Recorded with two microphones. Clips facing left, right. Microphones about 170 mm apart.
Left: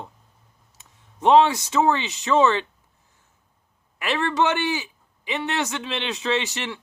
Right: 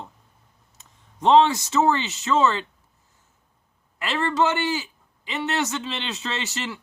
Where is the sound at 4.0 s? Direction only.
20° left (ahead or behind).